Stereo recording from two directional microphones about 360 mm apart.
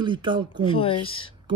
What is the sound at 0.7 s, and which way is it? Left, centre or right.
Speech, centre.